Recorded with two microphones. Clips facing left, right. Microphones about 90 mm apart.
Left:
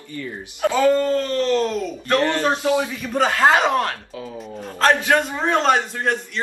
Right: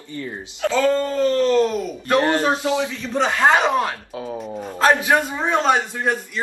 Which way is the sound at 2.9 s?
10° left (ahead or behind).